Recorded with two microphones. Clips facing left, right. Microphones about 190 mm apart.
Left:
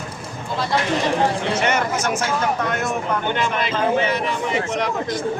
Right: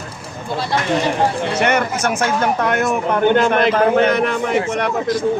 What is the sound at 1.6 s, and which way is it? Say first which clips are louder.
A man's voice: right 5 dB; 60° right (ahead or behind).